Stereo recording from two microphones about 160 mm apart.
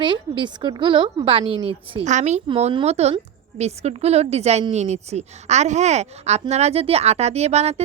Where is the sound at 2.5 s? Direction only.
35° right (ahead or behind).